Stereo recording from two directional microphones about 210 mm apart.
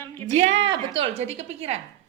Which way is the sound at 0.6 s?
25° right (ahead or behind).